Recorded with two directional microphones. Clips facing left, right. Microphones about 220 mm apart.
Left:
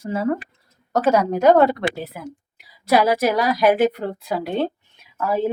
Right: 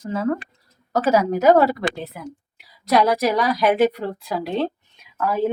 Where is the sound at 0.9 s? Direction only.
5° right (ahead or behind).